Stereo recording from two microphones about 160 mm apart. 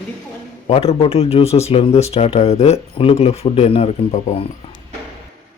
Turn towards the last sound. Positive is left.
turn(degrees=40)  # may be behind; listen again after turning